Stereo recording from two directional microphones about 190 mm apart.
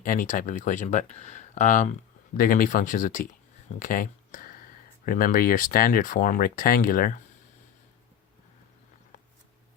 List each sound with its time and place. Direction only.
0.0 s speech: 45° left (ahead or behind)